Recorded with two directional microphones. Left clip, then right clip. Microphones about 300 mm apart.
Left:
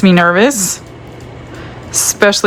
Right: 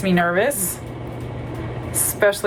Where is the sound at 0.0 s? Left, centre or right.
Centre.